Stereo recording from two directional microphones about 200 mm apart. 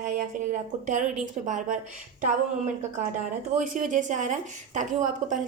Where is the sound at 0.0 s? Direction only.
40° right (ahead or behind).